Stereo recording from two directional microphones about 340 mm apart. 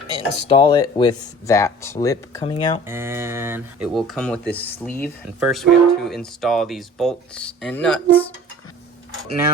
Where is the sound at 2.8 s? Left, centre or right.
Centre.